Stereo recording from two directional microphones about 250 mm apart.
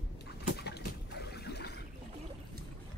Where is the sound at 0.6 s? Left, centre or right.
Left.